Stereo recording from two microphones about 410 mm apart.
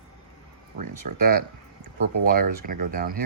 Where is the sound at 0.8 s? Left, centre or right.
Right.